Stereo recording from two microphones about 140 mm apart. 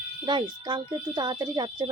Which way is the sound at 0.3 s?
35° right (ahead or behind).